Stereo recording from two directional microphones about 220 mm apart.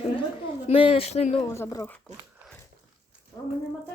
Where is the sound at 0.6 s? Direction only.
25° left (ahead or behind).